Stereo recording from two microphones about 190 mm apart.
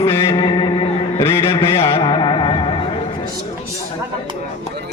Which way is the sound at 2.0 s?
25° left (ahead or behind).